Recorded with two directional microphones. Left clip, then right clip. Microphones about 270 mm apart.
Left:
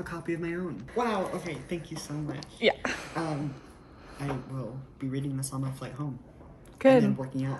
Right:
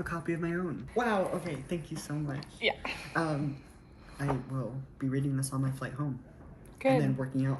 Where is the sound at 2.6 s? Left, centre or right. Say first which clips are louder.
Left 5 dB; left.